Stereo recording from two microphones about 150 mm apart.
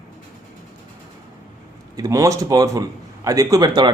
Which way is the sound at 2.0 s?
20° right (ahead or behind).